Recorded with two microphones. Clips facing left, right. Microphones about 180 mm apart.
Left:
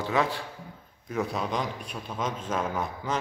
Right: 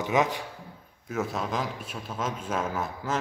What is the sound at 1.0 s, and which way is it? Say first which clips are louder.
Speech: left 1 dB; 5° right (ahead or behind).